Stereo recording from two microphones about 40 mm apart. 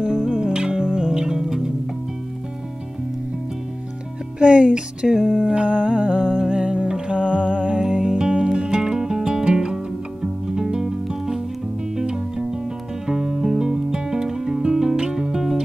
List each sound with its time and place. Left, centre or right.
0.0 s music: right
4.4 s speech: right
5.2 s a sound: centre
5.9 s humming: right
6.4 s music: right